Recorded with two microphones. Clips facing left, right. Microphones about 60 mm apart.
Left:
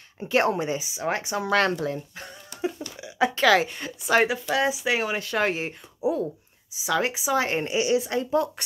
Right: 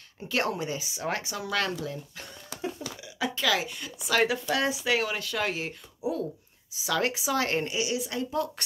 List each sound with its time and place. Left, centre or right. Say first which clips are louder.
0.2 s a woman's voice: left 6 dB; left
0.7 s a woman's voice: left 4 dB; centre
1.4 s a woman's voice: left 9 dB; left
4.3 s speech: left 3 dB; centre
4.9 s a woman's voice: left 3 dB; left
6.7 s a woman's voice: left 3 dB; centre; by 8.5 s left